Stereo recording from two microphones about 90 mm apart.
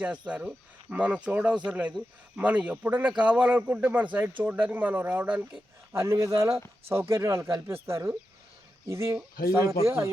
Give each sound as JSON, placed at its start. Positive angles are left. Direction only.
{"t": 0.0, "sound": "speech", "side_deg": -15}
{"t": 5.9, "sound": "speech", "side_deg": -35}